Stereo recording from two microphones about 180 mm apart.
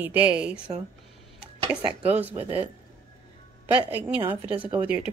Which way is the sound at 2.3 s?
30° right (ahead or behind).